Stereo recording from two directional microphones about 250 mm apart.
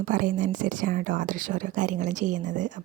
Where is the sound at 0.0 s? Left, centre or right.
Right.